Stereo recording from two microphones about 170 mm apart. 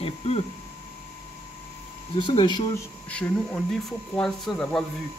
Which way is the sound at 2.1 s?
30° left (ahead or behind).